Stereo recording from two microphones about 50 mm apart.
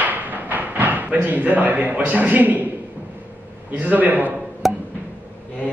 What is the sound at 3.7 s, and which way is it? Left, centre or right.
Speech, right.